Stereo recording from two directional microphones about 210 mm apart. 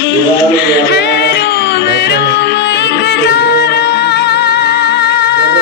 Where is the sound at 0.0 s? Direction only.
55° left (ahead or behind).